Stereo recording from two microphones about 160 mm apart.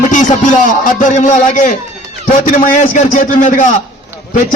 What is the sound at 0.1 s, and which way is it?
A man's voice, 50° left (ahead or behind).